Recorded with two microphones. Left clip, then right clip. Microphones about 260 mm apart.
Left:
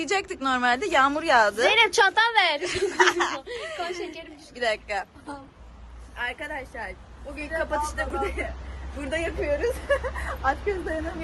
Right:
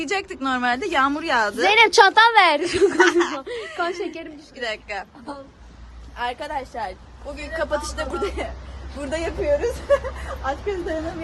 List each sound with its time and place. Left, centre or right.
0.0 s a woman's voice: centre
1.7 s a woman's voice: right
3.0 s a woman's voice: centre
3.9 s a woman's voice: right
4.5 s a woman's voice: centre
6.1 s a woman's voice: centre